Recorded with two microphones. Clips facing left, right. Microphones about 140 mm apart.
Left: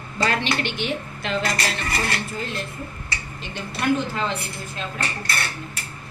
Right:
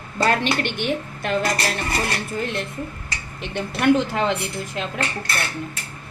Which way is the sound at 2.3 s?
60° right (ahead or behind).